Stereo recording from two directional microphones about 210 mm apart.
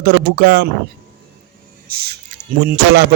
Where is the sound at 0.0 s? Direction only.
50° right (ahead or behind).